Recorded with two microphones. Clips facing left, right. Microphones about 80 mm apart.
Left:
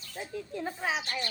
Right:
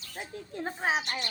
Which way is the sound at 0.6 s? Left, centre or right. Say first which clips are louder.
Right 3 dB; right.